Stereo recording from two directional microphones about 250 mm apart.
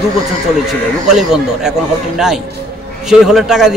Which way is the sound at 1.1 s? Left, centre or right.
Centre.